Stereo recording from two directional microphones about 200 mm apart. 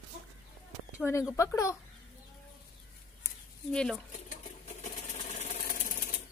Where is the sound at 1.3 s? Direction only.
15° left (ahead or behind).